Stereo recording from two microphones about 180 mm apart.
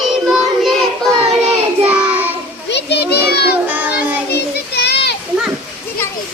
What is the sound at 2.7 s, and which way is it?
Children playing, 65° left (ahead or behind).